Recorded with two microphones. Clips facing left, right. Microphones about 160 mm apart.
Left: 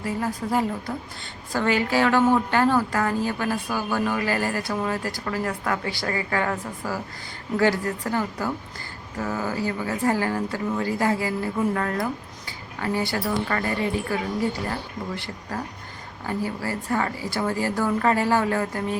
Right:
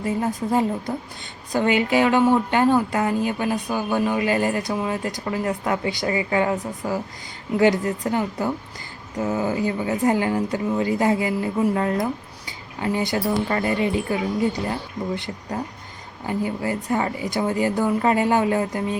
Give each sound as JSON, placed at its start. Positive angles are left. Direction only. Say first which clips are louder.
{"t": 0.0, "sound": "a woman's voice", "louder": "right 3 dB", "side_deg": -20}